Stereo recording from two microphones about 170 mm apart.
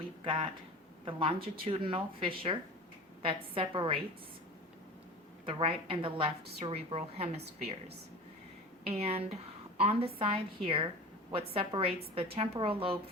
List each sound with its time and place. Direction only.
1.0 s speech: 30° right (ahead or behind)
5.5 s speech: 30° right (ahead or behind)
8.8 s speech: 35° right (ahead or behind)